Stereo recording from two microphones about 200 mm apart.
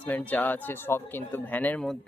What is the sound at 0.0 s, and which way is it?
Speech, 10° left (ahead or behind).